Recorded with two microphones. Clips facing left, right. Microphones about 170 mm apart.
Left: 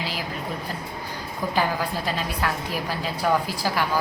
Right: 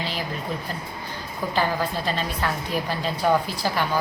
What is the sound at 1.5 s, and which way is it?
A woman's voice, 10° left (ahead or behind).